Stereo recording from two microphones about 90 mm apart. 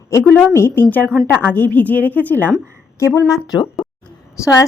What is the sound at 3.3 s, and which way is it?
Speech, 45° left (ahead or behind).